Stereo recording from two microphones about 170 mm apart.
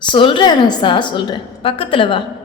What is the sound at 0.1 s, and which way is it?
A woman's voice, 30° left (ahead or behind).